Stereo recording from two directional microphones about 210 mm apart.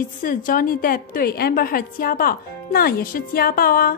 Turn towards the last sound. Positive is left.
turn(degrees=45)  # may be behind; listen again after turning